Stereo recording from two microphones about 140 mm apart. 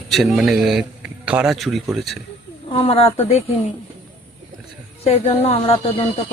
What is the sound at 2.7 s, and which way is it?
Speech, 40° left (ahead or behind).